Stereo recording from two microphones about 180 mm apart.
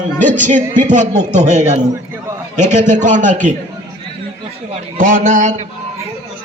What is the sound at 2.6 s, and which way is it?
Speech, 40° right (ahead or behind).